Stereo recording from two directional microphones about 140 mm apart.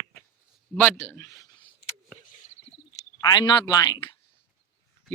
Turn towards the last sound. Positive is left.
turn(degrees=30)  # may be behind; listen again after turning